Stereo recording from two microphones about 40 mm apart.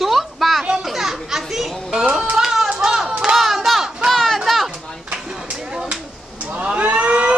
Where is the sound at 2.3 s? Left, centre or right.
Centre.